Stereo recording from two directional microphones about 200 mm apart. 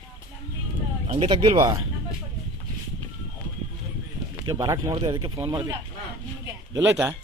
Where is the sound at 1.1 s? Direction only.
25° right (ahead or behind).